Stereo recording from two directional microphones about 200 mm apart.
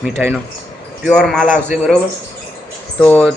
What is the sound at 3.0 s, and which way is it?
Speech, 10° left (ahead or behind).